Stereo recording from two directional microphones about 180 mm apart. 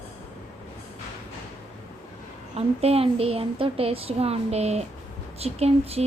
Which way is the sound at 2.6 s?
35° right (ahead or behind).